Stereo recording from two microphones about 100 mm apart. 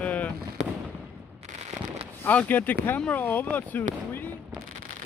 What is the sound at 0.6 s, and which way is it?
Fireworks, 90° right.